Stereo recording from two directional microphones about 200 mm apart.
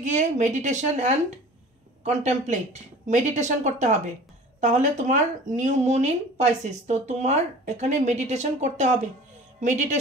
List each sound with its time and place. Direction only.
0.0 s speech: 40° right (ahead or behind)